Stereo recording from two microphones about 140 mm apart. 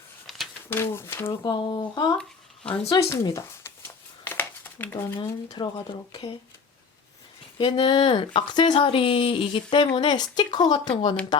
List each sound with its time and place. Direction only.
0.7 s speech: 15° left (ahead or behind)
1.5 s speech: 30° left (ahead or behind)
3.3 s a sound: 20° left (ahead or behind)
5.5 s speech: 35° left (ahead or behind)
7.6 s speech: 35° left (ahead or behind)